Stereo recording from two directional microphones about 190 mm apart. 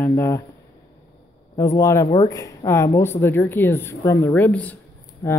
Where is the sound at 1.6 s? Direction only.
15° left (ahead or behind).